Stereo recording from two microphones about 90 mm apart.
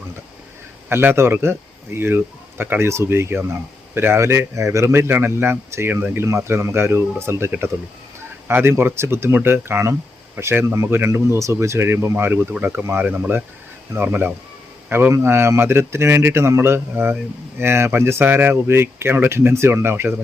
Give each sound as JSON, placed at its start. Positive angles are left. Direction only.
{"t": 0.9, "sound": "speech", "side_deg": -25}
{"t": 6.2, "sound": "speech", "side_deg": -30}